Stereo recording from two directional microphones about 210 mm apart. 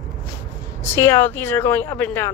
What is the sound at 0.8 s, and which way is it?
Speech, 10° left (ahead or behind).